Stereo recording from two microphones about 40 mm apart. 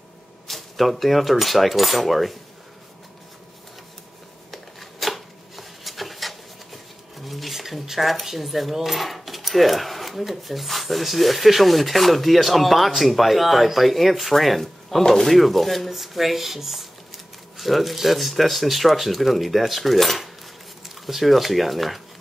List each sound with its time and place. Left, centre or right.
0.5 s speech: centre
4.5 s a sound: centre
15.2 s speech: centre